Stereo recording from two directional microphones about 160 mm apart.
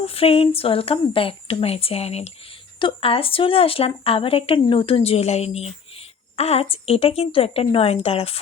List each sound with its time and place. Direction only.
0.0 s speech: 40° left (ahead or behind)